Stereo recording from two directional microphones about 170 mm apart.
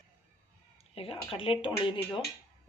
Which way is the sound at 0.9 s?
35° left (ahead or behind).